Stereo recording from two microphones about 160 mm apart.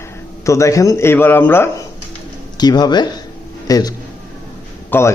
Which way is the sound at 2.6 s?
25° left (ahead or behind).